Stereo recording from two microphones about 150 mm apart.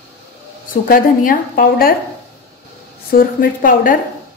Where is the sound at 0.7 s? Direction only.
65° left (ahead or behind).